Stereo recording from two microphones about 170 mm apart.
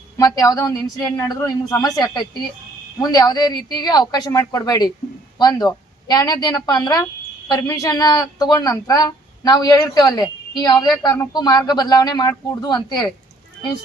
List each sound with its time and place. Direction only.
0.2 s a woman's voice: 20° left (ahead or behind)